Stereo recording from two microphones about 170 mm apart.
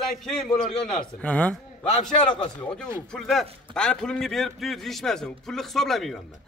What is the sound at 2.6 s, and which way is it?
A man's voice, 5° left (ahead or behind).